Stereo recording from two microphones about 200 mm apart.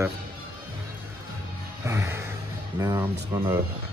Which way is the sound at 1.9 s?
15° right (ahead or behind).